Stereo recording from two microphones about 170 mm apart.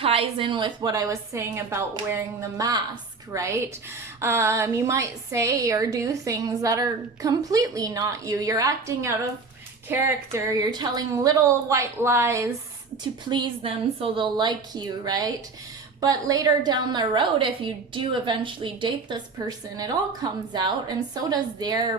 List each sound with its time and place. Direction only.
0.0 s a woman's voice: 35° right (ahead or behind); by 12.5 s 15° right (ahead or behind)
13.2 s a woman's voice: 25° right (ahead or behind)